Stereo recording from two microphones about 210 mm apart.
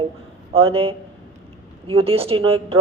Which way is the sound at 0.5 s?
25° right (ahead or behind).